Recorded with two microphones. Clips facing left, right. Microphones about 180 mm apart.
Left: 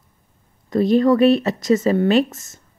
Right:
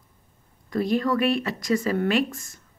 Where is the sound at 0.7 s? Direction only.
25° left (ahead or behind).